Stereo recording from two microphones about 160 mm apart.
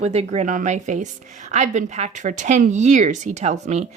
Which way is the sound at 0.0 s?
45° right (ahead or behind).